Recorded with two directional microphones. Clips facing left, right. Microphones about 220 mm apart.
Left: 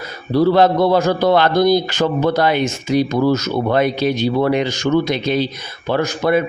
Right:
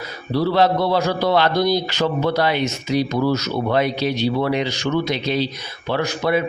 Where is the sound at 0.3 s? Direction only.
50° left (ahead or behind).